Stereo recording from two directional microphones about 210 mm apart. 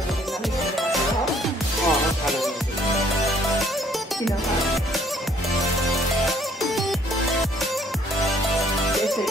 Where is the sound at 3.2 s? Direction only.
Centre (ahead or behind).